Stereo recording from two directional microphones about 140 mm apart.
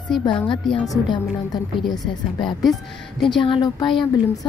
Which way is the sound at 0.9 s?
30° left (ahead or behind).